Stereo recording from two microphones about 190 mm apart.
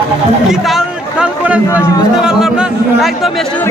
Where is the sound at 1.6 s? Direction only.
15° left (ahead or behind).